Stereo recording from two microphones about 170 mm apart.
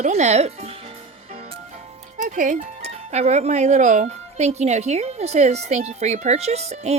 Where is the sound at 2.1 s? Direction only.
50° right (ahead or behind).